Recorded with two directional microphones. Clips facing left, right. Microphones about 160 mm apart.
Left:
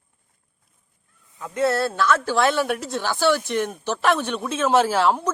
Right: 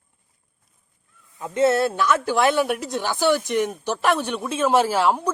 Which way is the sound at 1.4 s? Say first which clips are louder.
Right 3 dB; 20° right (ahead or behind).